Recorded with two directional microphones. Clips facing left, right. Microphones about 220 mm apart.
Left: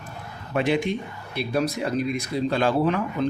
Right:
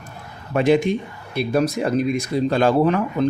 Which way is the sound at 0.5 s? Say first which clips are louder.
Right 6 dB; 45° right (ahead or behind).